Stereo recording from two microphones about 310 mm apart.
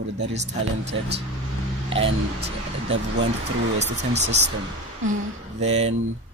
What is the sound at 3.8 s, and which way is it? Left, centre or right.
Speech, right.